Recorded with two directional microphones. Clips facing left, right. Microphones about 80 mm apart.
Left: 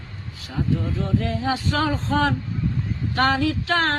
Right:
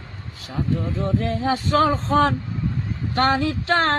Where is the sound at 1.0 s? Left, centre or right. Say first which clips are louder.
Right 3 dB; right.